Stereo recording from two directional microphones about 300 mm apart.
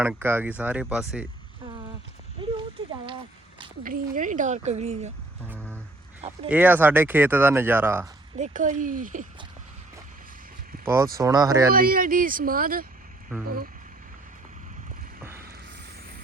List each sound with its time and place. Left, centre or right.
0.0 s speech: centre
3.8 s a woman's voice: right
6.5 s speech: centre
8.4 s a woman's voice: right
10.8 s speech: centre
11.7 s a woman's voice: right